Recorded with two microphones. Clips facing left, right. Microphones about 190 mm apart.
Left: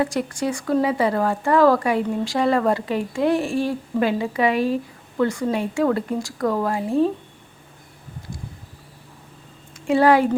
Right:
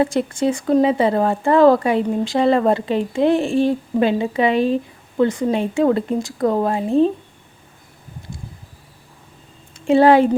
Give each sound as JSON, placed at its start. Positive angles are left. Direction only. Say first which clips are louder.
{"t": 0.0, "sound": "speech", "louder": "right 4 dB", "side_deg": -25}
{"t": 9.8, "sound": "speech", "louder": "right 4 dB", "side_deg": -25}